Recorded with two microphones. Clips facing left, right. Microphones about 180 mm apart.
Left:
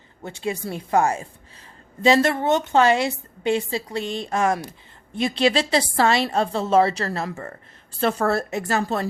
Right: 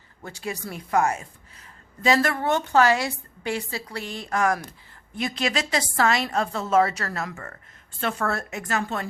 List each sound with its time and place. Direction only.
0.2 s a woman's voice: 25° left (ahead or behind)